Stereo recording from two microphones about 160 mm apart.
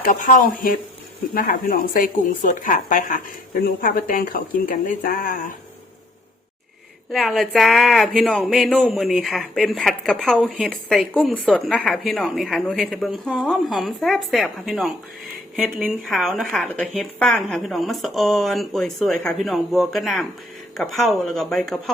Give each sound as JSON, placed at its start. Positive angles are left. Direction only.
{"t": 0.0, "sound": "speech", "side_deg": 55}
{"t": 7.1, "sound": "a woman's voice", "side_deg": 0}